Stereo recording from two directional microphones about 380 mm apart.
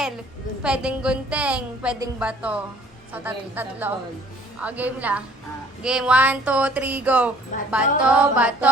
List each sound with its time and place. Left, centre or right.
0.6 s a woman's voice: centre